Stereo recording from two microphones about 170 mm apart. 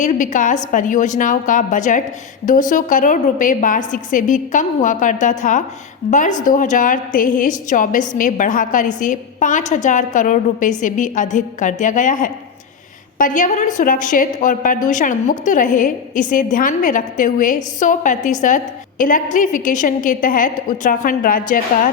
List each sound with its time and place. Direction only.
0.0 s a woman's voice: 50° left (ahead or behind)